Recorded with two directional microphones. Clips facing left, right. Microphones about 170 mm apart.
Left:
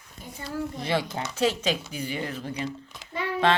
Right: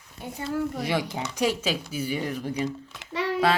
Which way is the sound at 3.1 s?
90° right.